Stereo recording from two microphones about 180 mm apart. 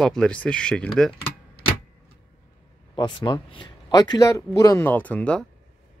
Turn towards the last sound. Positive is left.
turn(degrees=5)  # may be behind; listen again after turning